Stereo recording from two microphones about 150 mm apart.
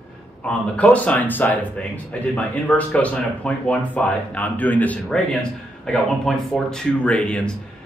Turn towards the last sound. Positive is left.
turn(degrees=10)  # may be behind; listen again after turning